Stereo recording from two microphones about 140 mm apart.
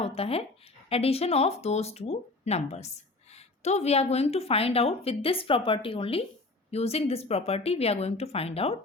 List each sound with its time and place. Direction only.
0.0 s a woman's voice: 45° left (ahead or behind)